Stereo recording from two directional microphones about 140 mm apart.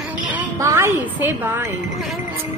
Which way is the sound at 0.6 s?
20° right (ahead or behind).